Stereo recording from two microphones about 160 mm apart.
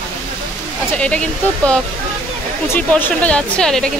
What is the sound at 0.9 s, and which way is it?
Speech, 5° left (ahead or behind).